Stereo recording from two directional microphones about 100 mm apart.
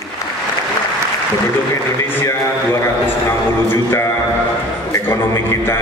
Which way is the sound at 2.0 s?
25° left (ahead or behind).